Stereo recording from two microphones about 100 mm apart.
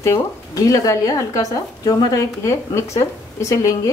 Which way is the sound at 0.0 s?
35° left (ahead or behind).